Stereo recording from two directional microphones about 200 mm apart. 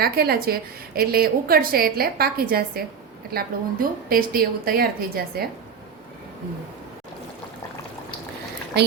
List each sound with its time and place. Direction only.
0.0 s a woman's voice: 50° right (ahead or behind)